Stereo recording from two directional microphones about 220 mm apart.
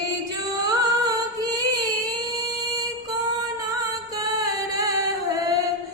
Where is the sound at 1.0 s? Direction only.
15° right (ahead or behind).